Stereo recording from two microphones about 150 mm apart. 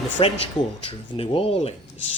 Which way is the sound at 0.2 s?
40° left (ahead or behind).